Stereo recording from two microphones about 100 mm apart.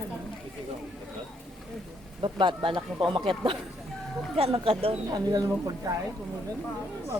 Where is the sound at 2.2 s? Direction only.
50° right (ahead or behind).